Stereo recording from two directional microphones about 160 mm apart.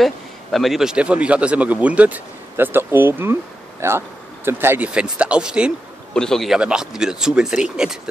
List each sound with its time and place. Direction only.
0.0 s speech: centre (ahead or behind)